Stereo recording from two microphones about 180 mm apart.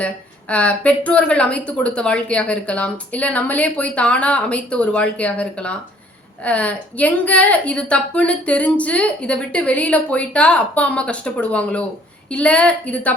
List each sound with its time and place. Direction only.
0.0 s speech: 5° left (ahead or behind)